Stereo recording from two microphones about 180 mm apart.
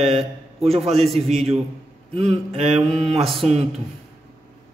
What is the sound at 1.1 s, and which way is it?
Speech, centre (ahead or behind).